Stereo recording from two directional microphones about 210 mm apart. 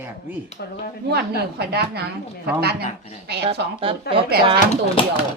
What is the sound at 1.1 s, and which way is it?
Speech, 50° right (ahead or behind).